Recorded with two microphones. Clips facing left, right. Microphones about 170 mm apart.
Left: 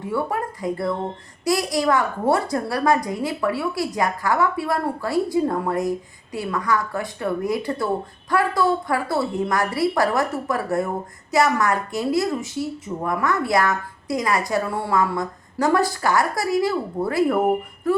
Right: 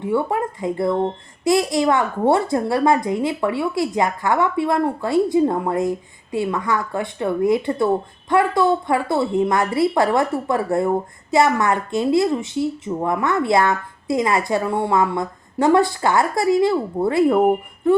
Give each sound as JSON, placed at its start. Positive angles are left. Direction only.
{"t": 0.0, "sound": "a woman's voice", "side_deg": -25}